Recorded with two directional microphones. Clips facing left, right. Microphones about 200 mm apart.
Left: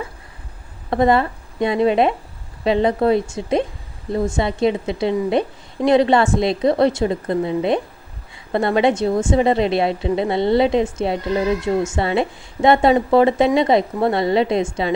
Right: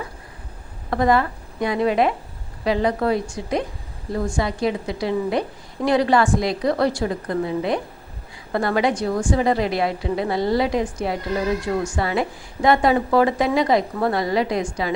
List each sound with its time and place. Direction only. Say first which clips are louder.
0.9 s a woman's voice: left 3 dB; 25° left (ahead or behind)